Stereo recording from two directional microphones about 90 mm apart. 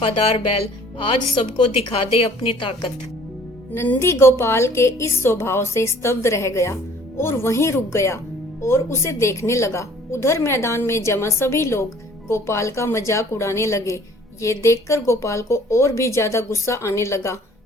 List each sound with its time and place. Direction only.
0.0 s speech: 90° left
3.8 s a woman's voice: 25° left (ahead or behind)